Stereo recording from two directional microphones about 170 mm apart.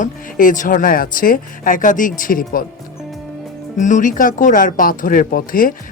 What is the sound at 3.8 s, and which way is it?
Speech, 45° left (ahead or behind).